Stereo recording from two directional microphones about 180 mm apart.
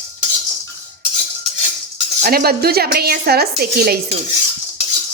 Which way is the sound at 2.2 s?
60° right (ahead or behind).